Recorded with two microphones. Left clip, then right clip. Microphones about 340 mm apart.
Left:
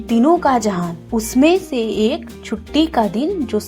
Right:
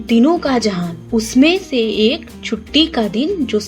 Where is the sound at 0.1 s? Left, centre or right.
Left.